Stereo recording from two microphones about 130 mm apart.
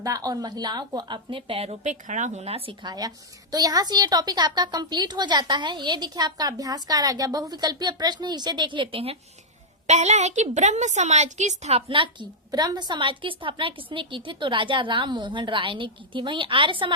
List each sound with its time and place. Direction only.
0.0 s a woman's voice: 30° right (ahead or behind); by 2.7 s 50° right (ahead or behind)
2.8 s a woman's voice: 30° right (ahead or behind); by 9.1 s 45° right (ahead or behind)
9.8 s a woman's voice: 60° right (ahead or behind)
11.9 s a woman's voice: 40° right (ahead or behind)
12.5 s a woman's voice: 30° right (ahead or behind)